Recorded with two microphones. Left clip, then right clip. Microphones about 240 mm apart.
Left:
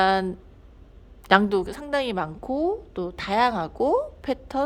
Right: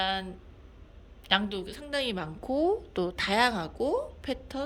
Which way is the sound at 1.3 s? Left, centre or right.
Left.